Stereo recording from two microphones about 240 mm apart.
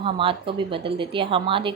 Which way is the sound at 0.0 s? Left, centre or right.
Right.